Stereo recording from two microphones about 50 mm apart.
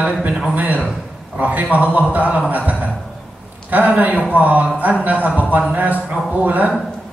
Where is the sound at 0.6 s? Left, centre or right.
Right.